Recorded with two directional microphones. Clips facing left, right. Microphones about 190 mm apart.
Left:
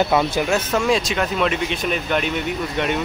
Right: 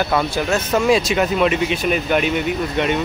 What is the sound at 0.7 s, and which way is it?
Speech, 5° right (ahead or behind).